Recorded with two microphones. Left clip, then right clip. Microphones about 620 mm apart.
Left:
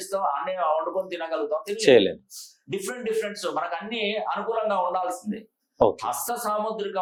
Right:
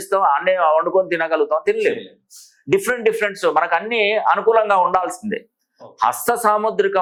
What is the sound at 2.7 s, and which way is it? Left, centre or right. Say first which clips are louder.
Speech: right 12 dB; right.